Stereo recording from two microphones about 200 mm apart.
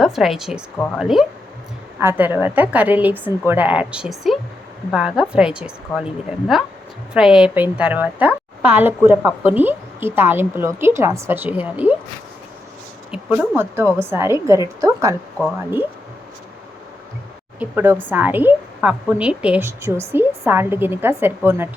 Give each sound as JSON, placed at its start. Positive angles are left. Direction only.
{"t": 0.0, "sound": "a woman's voice", "side_deg": 0}
{"t": 7.1, "sound": "a woman's voice", "side_deg": -5}
{"t": 13.1, "sound": "a woman's voice", "side_deg": -5}
{"t": 17.6, "sound": "a woman's voice", "side_deg": -10}